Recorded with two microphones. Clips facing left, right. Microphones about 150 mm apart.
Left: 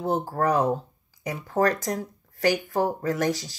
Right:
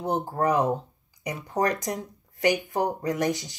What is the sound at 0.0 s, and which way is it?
Speech, 20° right (ahead or behind).